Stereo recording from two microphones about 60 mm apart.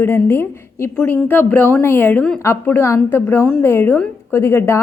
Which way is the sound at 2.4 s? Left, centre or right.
Left.